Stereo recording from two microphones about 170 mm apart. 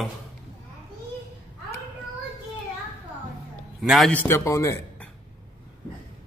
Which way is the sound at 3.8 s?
Centre (ahead or behind).